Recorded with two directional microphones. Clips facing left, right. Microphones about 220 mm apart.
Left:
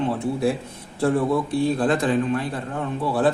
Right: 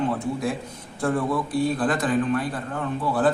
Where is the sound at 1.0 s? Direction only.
25° left (ahead or behind).